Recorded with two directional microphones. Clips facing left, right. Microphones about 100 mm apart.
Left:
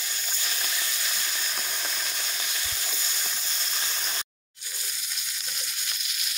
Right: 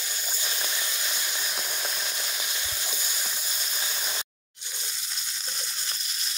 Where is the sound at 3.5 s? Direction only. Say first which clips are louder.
Even; 10° right (ahead or behind).